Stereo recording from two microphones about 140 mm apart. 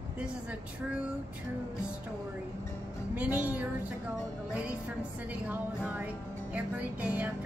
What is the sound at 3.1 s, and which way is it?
Speech, 10° right (ahead or behind).